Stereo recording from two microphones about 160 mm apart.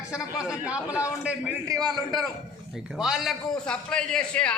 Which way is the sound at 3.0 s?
5° right (ahead or behind).